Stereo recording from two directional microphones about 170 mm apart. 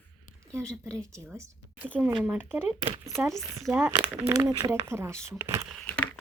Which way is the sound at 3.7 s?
15° right (ahead or behind).